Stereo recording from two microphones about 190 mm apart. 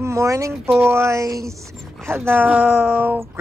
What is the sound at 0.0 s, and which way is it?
Speech, 15° right (ahead or behind).